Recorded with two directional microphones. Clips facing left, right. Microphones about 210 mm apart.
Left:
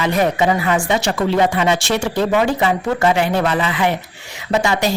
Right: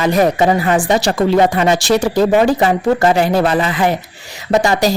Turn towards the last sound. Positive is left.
turn(degrees=-40)  # may be behind; listen again after turning